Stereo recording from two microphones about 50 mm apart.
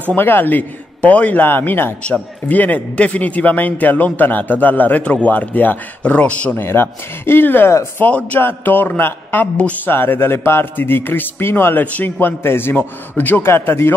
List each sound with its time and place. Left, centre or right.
0.2 s a man's voice: left
1.5 s a man's voice: left
5.0 s a man's voice: left
6.5 s a man's voice: left
13.1 s a man's voice: left
13.4 s speech: left